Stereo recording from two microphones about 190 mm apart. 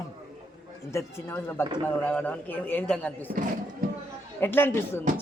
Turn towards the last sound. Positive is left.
turn(degrees=10)  # may be behind; listen again after turning